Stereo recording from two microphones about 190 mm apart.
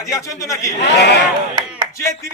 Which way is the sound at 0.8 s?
65° left (ahead or behind).